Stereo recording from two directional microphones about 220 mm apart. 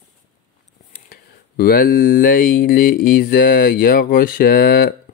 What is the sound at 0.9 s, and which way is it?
Speech, 40° left (ahead or behind).